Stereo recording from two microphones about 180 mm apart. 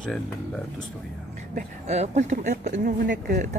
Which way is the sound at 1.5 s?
40° right (ahead or behind).